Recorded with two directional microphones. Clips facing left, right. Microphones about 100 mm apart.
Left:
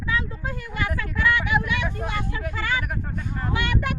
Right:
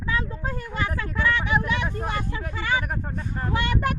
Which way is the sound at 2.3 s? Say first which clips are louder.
Right 1 dB; 25° right (ahead or behind).